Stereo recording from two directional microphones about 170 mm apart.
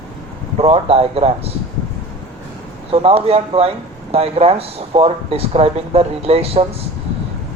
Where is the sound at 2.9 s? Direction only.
35° right (ahead or behind).